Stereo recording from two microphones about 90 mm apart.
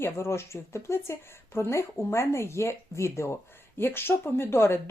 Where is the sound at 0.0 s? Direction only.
30° left (ahead or behind).